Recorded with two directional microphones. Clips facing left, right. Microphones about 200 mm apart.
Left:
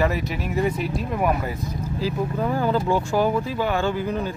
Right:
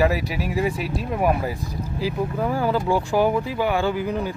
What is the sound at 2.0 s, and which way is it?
Speech, 10° right (ahead or behind).